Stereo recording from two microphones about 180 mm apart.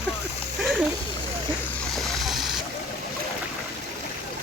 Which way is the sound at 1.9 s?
Centre (ahead or behind).